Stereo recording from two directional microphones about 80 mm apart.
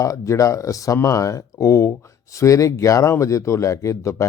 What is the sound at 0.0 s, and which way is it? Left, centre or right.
Speech, left.